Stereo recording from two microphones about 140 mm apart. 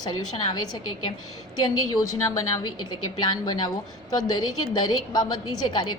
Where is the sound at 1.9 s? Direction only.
25° left (ahead or behind).